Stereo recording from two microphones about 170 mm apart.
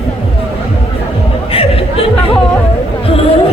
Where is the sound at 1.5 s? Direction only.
35° left (ahead or behind).